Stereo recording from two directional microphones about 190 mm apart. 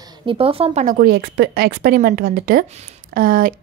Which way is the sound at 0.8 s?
55° right (ahead or behind).